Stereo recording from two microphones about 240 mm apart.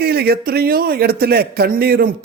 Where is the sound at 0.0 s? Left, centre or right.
Right.